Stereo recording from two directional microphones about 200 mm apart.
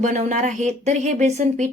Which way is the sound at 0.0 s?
35° right (ahead or behind).